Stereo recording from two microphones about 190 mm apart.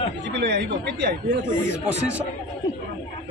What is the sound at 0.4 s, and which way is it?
Speech, 55° right (ahead or behind).